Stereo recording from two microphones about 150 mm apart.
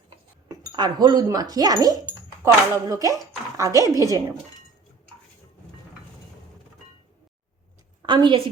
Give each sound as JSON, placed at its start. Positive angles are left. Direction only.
{"t": 0.4, "sound": "speech", "side_deg": -25}
{"t": 8.0, "sound": "a woman's voice", "side_deg": -30}